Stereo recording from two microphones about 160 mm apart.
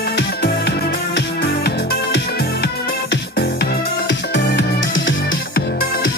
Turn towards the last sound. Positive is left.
turn(degrees=75)  # may be behind; listen again after turning